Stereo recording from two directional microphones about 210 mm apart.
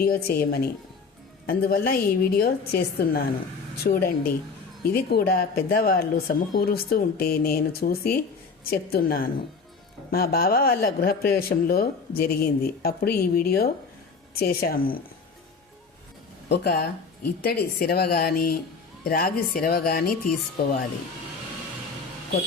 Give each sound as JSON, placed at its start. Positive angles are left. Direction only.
{"t": 0.0, "sound": "speech", "side_deg": 45}
{"t": 16.5, "sound": "speech", "side_deg": 50}